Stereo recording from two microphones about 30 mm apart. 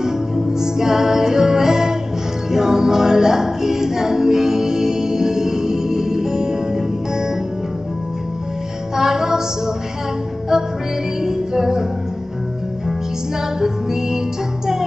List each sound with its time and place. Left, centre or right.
0.0 s music: centre
8.9 s music: centre
10.5 s music: centre
13.6 s music: centre